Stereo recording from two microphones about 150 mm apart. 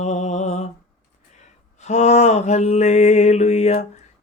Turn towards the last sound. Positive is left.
turn(degrees=45)  # may be behind; listen again after turning